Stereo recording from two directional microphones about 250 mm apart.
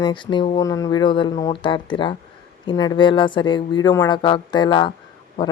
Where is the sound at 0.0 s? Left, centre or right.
Centre.